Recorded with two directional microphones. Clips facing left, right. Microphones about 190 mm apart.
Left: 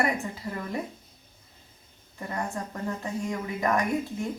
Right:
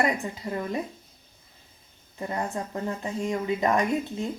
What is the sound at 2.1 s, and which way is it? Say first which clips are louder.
Speech: right 3 dB; 20° right (ahead or behind).